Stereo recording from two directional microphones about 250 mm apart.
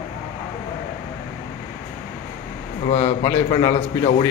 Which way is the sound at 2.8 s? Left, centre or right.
Left.